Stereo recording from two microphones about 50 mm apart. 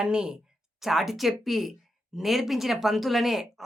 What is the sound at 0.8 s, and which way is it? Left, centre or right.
Speech, centre.